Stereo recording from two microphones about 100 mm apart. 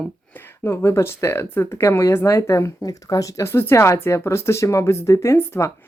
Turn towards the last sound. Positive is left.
turn(degrees=25)  # may be behind; listen again after turning